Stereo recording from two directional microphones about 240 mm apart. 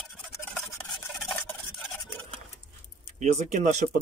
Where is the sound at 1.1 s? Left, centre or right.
Centre.